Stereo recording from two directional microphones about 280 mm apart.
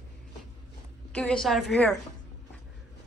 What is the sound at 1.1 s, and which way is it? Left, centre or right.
Speech, centre.